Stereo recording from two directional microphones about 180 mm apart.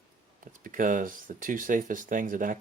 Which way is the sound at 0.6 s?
50° right (ahead or behind).